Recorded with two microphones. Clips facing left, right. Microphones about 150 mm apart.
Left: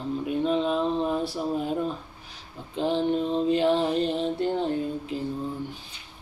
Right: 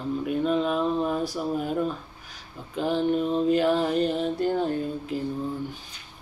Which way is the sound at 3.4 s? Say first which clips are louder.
Even; 25° left (ahead or behind).